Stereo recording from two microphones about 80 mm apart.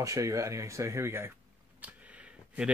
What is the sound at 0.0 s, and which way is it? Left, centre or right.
Speech, right.